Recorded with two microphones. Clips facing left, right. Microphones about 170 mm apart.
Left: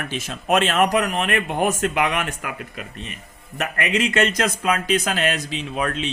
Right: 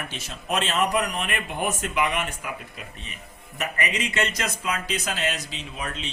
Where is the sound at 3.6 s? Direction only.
55° left (ahead or behind).